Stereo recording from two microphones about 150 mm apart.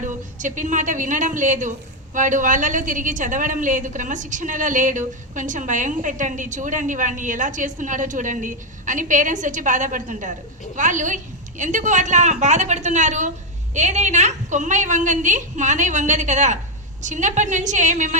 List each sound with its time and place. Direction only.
0.0 s a woman's voice: 55° right (ahead or behind)